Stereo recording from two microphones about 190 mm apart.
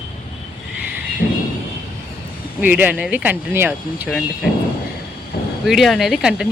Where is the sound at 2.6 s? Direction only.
10° right (ahead or behind).